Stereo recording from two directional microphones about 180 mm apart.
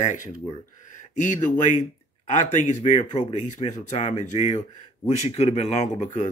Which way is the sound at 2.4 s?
40° left (ahead or behind).